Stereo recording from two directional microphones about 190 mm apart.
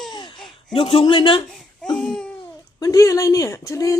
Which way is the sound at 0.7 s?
30° left (ahead or behind).